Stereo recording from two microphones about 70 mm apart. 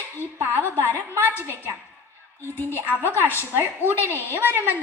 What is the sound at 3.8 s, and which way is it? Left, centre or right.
Speech, left.